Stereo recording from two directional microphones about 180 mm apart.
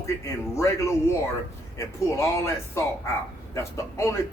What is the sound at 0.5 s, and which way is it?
Speech, 15° left (ahead or behind).